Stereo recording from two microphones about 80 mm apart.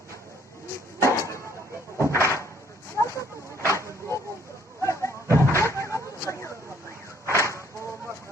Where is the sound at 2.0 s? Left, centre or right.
Left.